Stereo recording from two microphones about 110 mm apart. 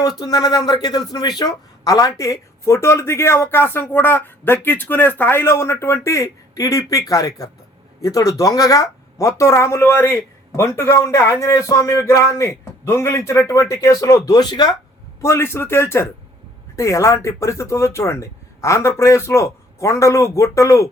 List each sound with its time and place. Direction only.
0.2 s speech: 35° left (ahead or behind)
15.2 s speech: 25° left (ahead or behind)